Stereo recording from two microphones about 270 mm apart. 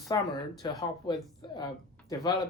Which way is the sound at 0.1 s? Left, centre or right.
Centre.